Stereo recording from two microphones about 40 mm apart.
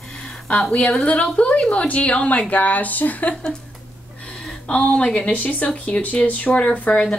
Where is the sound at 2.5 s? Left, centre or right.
Left.